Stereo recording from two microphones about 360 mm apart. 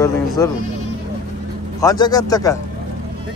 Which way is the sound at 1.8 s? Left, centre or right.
Centre.